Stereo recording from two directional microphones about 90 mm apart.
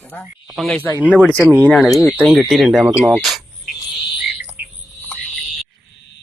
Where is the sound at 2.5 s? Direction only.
5° right (ahead or behind).